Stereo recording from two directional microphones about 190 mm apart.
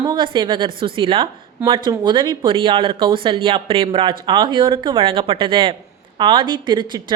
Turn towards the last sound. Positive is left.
turn(degrees=-25)  # may be behind; listen again after turning